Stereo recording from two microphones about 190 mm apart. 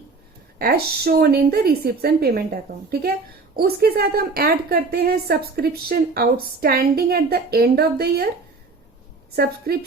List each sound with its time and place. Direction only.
0.6 s a woman's voice: 50° right (ahead or behind)
9.3 s a woman's voice: 55° right (ahead or behind)